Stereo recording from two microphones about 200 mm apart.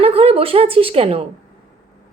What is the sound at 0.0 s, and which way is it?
A woman's voice, 30° right (ahead or behind).